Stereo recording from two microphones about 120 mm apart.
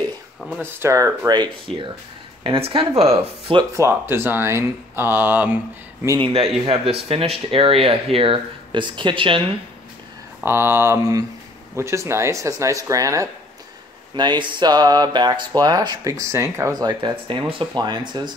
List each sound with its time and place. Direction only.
0.6 s speech: 20° right (ahead or behind)
2.4 s speech: 45° right (ahead or behind)
3.7 s speech: 20° right (ahead or behind)
6.1 s speech: 50° right (ahead or behind)
10.4 s speech: 20° right (ahead or behind)
14.1 s speech: 40° right (ahead or behind)